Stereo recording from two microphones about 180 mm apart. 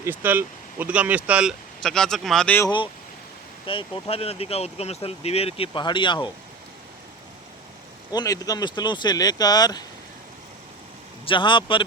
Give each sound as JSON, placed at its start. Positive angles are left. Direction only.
{"t": 0.0, "sound": "speech", "side_deg": -10}
{"t": 2.6, "sound": "speech", "side_deg": 25}
{"t": 8.1, "sound": "speech", "side_deg": 20}
{"t": 11.3, "sound": "speech", "side_deg": 25}